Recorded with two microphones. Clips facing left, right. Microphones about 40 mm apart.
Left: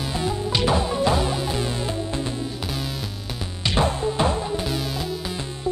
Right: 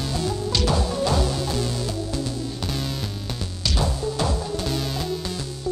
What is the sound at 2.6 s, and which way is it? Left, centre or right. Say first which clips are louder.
Music: right 1 dB; centre.